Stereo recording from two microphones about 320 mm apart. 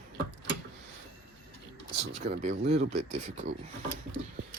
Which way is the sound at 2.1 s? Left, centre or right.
Centre.